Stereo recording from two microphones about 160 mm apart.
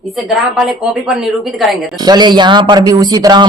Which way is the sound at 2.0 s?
25° right (ahead or behind).